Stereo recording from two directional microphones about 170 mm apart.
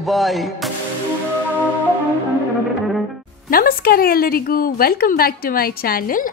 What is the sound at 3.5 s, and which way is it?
Speech, 60° left (ahead or behind).